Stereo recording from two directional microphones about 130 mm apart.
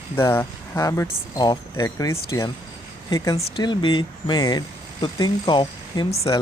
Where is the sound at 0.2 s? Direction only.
20° left (ahead or behind).